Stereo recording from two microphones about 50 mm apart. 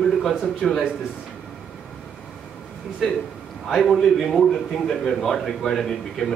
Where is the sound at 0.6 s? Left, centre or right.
Centre.